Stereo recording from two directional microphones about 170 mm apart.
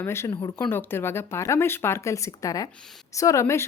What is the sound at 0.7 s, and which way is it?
Speech, 15° left (ahead or behind).